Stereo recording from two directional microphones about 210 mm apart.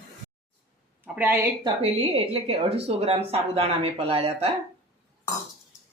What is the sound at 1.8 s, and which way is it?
Speech, 30° right (ahead or behind).